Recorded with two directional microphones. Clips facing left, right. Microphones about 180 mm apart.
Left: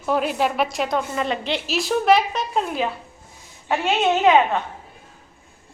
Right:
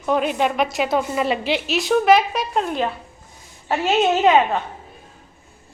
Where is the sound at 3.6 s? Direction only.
Centre (ahead or behind).